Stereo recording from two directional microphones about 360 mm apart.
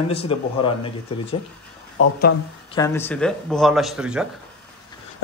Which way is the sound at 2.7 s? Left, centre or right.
Centre.